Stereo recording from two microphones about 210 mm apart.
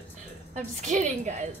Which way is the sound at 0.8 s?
35° right (ahead or behind).